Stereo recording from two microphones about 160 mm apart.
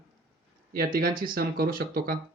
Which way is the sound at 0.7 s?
65° right (ahead or behind).